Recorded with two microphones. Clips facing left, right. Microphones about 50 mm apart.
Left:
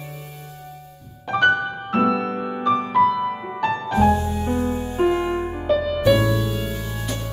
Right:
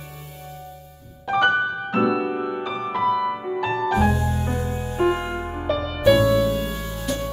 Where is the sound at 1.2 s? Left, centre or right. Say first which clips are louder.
Left 1 dB; centre.